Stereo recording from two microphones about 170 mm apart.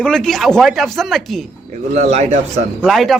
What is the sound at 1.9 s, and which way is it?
Speech, 40° right (ahead or behind).